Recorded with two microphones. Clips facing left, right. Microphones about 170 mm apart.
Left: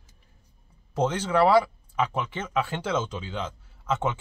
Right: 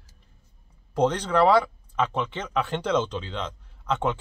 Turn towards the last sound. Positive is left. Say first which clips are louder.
# right 1 dB
turn(degrees=5)  # may be behind; listen again after turning